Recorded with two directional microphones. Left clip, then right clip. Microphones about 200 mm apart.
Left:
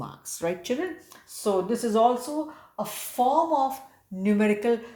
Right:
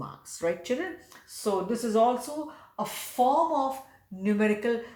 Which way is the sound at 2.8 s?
30° left (ahead or behind).